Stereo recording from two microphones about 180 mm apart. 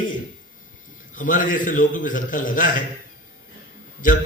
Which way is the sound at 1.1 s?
45° left (ahead or behind).